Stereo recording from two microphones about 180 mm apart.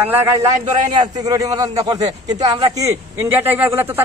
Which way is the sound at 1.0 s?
20° right (ahead or behind).